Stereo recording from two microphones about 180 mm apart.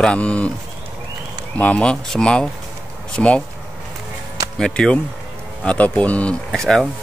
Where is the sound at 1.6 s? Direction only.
5° left (ahead or behind).